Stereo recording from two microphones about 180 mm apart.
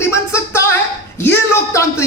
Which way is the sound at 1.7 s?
15° left (ahead or behind).